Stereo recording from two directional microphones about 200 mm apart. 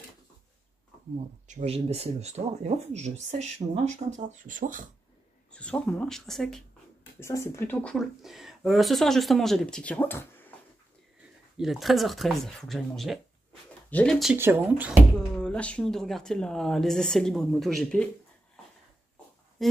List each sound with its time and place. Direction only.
1.5 s speech: 35° right (ahead or behind)
5.5 s speech: 5° left (ahead or behind)
7.2 s speech: 15° left (ahead or behind)
11.5 s speech: centre (ahead or behind)
14.3 s speech: 10° right (ahead or behind)
15.1 s speech: 5° left (ahead or behind)
19.6 s speech: centre (ahead or behind)